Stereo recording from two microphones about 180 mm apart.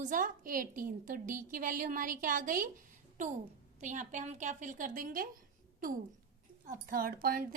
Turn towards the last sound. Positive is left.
turn(degrees=-50)  # may be behind; listen again after turning